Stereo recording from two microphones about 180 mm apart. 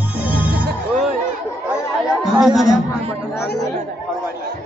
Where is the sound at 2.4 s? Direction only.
Centre (ahead or behind).